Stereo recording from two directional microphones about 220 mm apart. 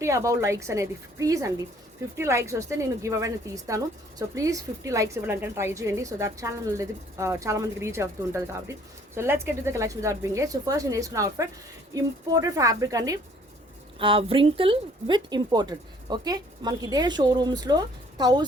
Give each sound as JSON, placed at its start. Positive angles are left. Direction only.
{"t": 0.0, "sound": "a woman's voice", "side_deg": -15}